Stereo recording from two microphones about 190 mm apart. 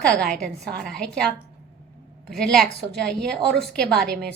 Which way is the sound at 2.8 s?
60° right (ahead or behind).